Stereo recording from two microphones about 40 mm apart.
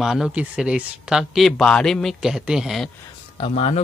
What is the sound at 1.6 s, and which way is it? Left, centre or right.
Speech, centre.